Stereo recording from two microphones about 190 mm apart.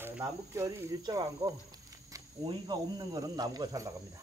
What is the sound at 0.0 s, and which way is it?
Speech, 15° right (ahead or behind).